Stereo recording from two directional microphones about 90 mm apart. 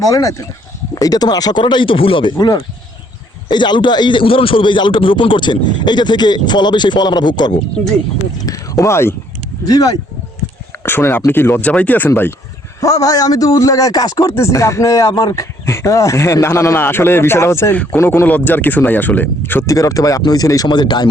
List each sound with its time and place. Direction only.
0.1 s a man's voice: 35° left (ahead or behind); by 2.5 s 70° left (ahead or behind)
3.5 s a man's voice: 55° left (ahead or behind)
8.4 s a sound: 40° left (ahead or behind)
9.6 s speech: 45° left (ahead or behind)
10.8 s speech: 25° left (ahead or behind)
12.8 s speech: 40° left (ahead or behind)
14.3 s speech: 30° left (ahead or behind)
19.6 s speech: 40° left (ahead or behind)